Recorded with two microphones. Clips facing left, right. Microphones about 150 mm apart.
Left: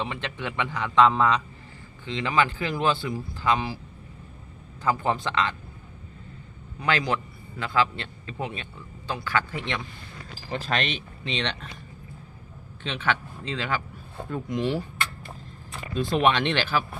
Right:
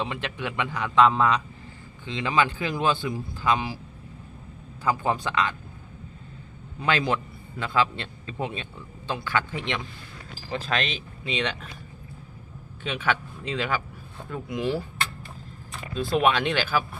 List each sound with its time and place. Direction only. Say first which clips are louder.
0.1 s a man's voice: right 1 dB; 15° right (ahead or behind)
4.8 s a man's voice: even; 15° right (ahead or behind)
6.7 s a man's voice: right 1 dB; 20° right (ahead or behind)
10.5 s speech: even; centre (ahead or behind)
12.8 s a man's voice: right 1 dB; 10° right (ahead or behind)
16.0 s speech: even; 5° right (ahead or behind)